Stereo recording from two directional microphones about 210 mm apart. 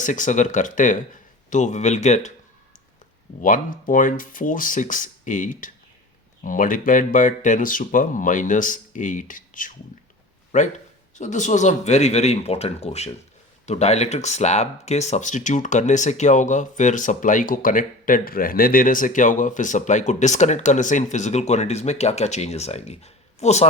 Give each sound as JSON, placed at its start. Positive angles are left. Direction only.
{"t": 0.0, "sound": "speech", "side_deg": 35}
{"t": 3.4, "sound": "speech", "side_deg": 40}